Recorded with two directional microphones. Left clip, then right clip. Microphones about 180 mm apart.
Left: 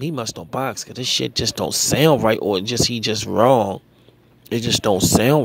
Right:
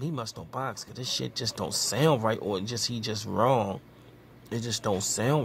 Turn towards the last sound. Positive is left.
turn(degrees=35)  # may be behind; listen again after turning